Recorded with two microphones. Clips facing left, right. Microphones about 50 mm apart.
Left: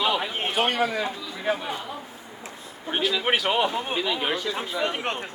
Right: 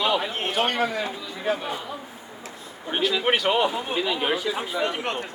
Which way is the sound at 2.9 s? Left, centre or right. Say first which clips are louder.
Right 1 dB; centre.